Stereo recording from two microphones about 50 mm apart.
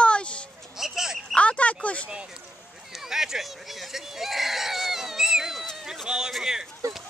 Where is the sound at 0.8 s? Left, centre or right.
Centre.